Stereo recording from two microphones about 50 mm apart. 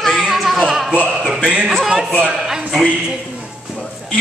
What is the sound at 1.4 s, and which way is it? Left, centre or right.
Speech, centre.